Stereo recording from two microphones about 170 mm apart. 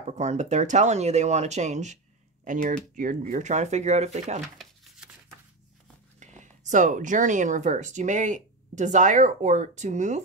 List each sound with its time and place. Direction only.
0.2 s speech: 40° right (ahead or behind)
6.1 s speech: 45° right (ahead or behind)